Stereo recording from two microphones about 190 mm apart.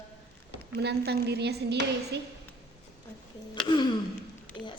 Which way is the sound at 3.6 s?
25° left (ahead or behind).